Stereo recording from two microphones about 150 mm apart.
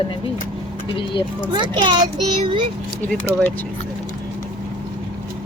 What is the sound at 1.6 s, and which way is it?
Speech, 30° right (ahead or behind).